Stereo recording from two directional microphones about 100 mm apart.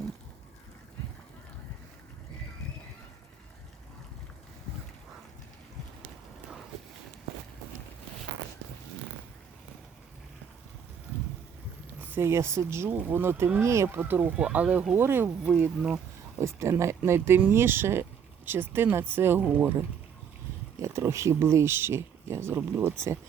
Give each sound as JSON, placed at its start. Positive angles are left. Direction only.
{"t": 11.9, "sound": "speech", "side_deg": -20}
{"t": 16.4, "sound": "speech", "side_deg": -30}
{"t": 20.7, "sound": "speech", "side_deg": -30}